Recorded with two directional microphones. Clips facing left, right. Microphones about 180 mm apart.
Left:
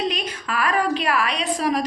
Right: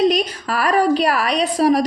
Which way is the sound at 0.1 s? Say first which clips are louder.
Right 7 dB; 35° right (ahead or behind).